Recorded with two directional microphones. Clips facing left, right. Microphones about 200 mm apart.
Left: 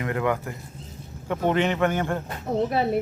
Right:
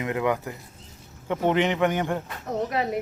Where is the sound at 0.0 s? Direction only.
20° right (ahead or behind).